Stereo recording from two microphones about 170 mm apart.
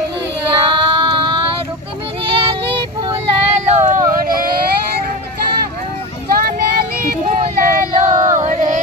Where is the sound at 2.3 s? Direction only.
30° right (ahead or behind); by 4.6 s 60° right (ahead or behind).